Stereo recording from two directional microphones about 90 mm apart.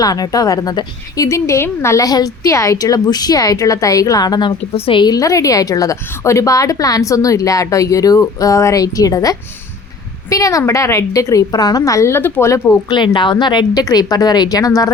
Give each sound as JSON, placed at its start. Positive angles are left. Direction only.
{"t": 0.0, "sound": "a woman's voice", "side_deg": 45}
{"t": 5.1, "sound": "a woman's voice", "side_deg": 40}
{"t": 12.9, "sound": "a woman's voice", "side_deg": 60}
{"t": 13.8, "sound": "a woman's voice", "side_deg": 45}